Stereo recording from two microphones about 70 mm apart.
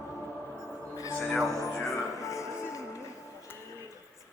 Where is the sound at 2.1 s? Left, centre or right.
Left.